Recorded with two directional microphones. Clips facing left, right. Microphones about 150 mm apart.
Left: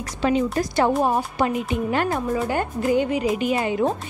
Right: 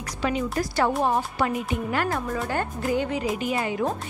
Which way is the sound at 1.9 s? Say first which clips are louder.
Left 4 dB; 20° left (ahead or behind).